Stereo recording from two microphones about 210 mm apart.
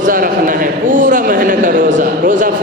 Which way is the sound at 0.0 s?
40° right (ahead or behind).